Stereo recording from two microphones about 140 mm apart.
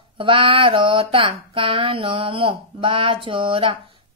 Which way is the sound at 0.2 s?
40° right (ahead or behind).